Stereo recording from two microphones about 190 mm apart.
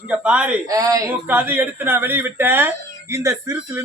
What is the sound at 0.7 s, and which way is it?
Speech, 20° right (ahead or behind).